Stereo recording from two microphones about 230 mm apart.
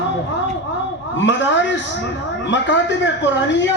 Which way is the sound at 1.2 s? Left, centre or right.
Left.